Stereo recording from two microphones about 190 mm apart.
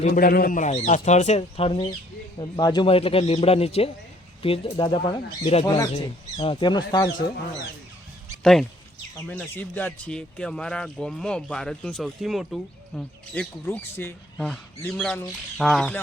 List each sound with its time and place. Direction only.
0.0 s speech: 45° left (ahead or behind)
5.6 s speech: 15° left (ahead or behind)
5.9 s speech: 30° left (ahead or behind)
9.1 s speech: 10° left (ahead or behind)